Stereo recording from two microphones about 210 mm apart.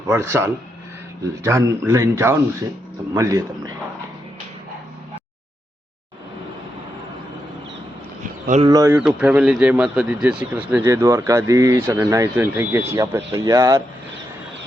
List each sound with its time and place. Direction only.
0.1 s speech: 10° right (ahead or behind)
8.4 s speech: 30° right (ahead or behind)
8.7 s speech: 15° right (ahead or behind)